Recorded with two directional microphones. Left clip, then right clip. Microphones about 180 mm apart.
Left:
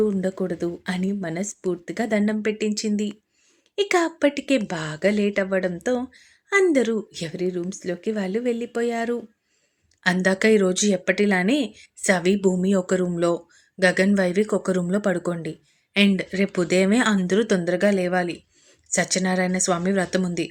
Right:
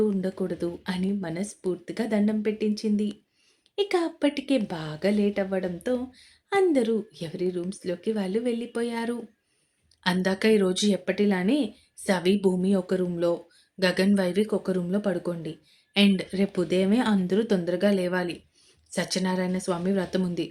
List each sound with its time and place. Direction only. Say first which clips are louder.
0.0 s speech: left 4 dB; 25° left (ahead or behind)